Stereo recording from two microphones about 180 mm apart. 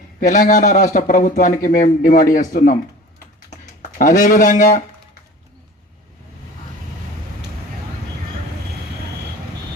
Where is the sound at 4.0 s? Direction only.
45° left (ahead or behind).